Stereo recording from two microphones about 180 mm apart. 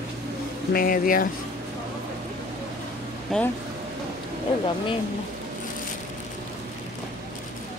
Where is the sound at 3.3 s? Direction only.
Centre (ahead or behind).